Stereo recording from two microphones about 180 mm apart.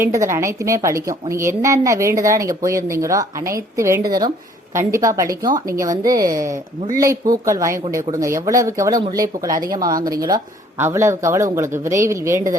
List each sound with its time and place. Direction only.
0.0 s a woman's voice: 15° right (ahead or behind)